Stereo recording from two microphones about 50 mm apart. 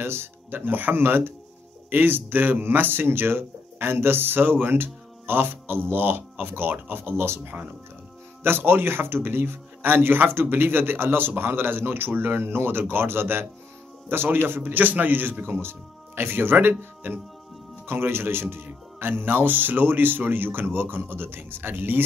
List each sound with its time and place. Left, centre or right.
0.0 s speech: right
0.6 s a man's voice: right
8.5 s a man's voice: right
16.2 s speech: right
16.5 s a man's voice: right
17.8 s speech: right